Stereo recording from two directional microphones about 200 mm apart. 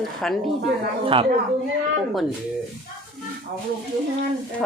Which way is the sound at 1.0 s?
25° right (ahead or behind).